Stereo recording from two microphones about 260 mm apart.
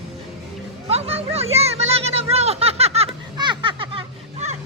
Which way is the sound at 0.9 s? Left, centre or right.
Right.